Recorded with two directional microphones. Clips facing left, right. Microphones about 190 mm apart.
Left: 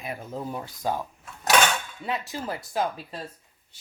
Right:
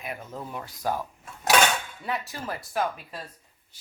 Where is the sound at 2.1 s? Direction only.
20° left (ahead or behind).